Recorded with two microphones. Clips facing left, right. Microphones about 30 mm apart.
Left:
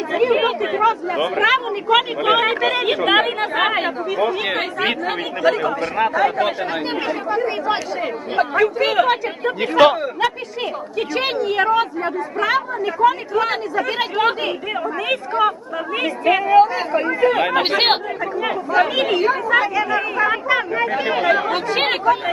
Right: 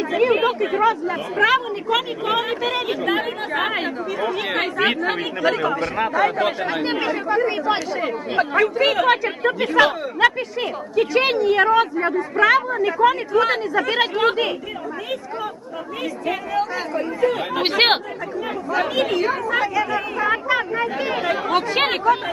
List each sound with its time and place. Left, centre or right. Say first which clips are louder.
0.1 s chatter: left 1 dB; centre
0.3 s chatter: left 1 dB; centre
1.4 s speech: right 1 dB; centre
2.0 s speech: left 6 dB; left
2.4 s speech: left 5 dB; left
2.8 s speech: left 5 dB; left
4.2 s speech: left 2 dB; centre
10.9 s speech: right 4 dB; centre
15.1 s speech: left 11 dB; left
16.2 s speech: left 11 dB; left
17.6 s speech: even; centre
18.7 s speech: left 3 dB; centre